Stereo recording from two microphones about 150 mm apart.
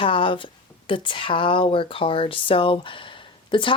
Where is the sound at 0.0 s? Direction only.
35° left (ahead or behind).